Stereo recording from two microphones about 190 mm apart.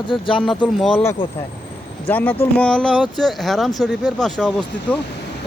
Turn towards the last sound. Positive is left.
turn(degrees=5)  # may be behind; listen again after turning